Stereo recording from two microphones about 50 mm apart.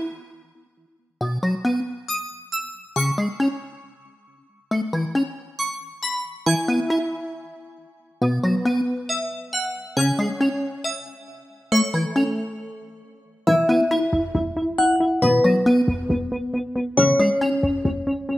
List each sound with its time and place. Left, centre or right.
1.1 s music: centre
4.6 s music: centre
8.2 s music: centre
10.5 s music: centre
11.7 s music: centre
13.5 s music: centre